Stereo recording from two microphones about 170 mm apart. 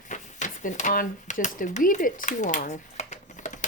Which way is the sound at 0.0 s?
45° left (ahead or behind).